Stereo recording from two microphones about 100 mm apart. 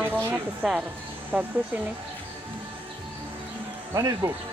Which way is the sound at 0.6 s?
Centre (ahead or behind).